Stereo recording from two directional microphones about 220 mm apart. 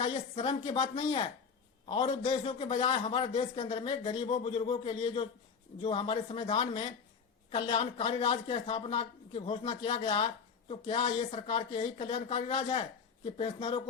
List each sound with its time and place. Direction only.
0.0 s a man's voice: 25° left (ahead or behind)